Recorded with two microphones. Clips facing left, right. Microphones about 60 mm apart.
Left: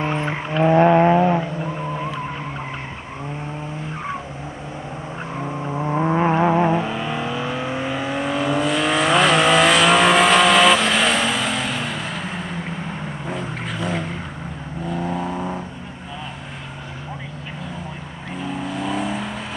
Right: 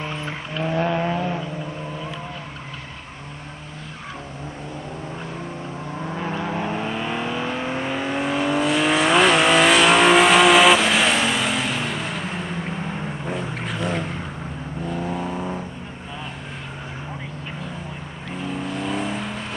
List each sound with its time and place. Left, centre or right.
0.0 s vehicle: left
1.4 s vehicle: left
5.4 s vehicle: left
5.9 s vehicle: left
6.7 s vehicle: centre
18.4 s vehicle: centre